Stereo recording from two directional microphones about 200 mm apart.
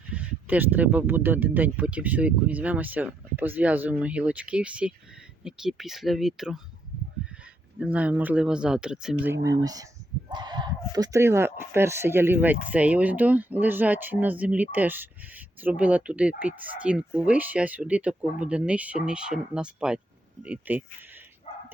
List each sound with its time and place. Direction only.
0.1 s speech: 5° right (ahead or behind)
7.8 s speech: 5° right (ahead or behind)
9.2 s speech: 15° right (ahead or behind)